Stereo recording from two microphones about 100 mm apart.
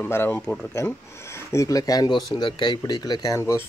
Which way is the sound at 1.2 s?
30° left (ahead or behind).